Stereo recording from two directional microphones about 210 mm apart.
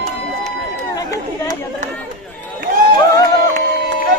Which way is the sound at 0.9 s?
15° left (ahead or behind).